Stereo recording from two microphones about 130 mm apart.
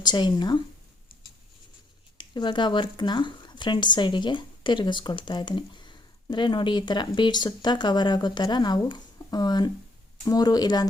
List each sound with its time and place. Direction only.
0.0 s speech: 35° left (ahead or behind)
2.1 s speech: 35° left (ahead or behind)